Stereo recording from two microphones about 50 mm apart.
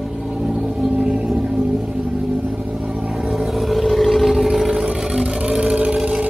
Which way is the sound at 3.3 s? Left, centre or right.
Centre.